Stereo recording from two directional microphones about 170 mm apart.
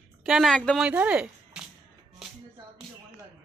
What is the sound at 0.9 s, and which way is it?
Speech, 10° right (ahead or behind).